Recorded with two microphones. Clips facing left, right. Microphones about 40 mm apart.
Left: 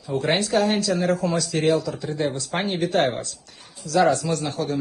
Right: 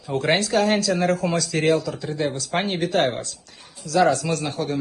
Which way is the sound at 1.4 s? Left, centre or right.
Right.